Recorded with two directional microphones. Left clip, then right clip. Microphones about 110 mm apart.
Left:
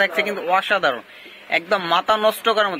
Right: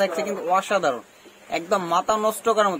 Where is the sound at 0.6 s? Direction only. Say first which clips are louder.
Left 4 dB; 15° right (ahead or behind).